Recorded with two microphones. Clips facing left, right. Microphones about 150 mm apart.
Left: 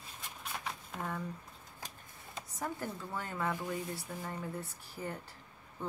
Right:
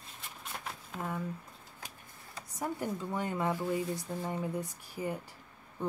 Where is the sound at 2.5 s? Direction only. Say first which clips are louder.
Right 4 dB; 15° right (ahead or behind).